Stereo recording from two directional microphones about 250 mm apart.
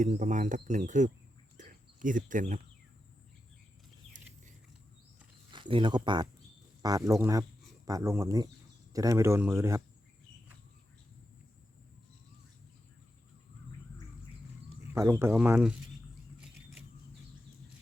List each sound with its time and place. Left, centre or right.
0.0 s speech: right
1.5 s a sound: right
5.5 s speech: centre
14.8 s speech: centre